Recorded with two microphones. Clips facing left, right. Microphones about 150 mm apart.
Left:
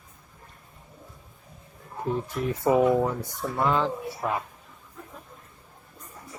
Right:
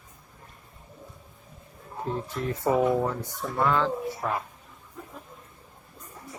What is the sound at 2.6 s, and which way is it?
Speech, 10° left (ahead or behind).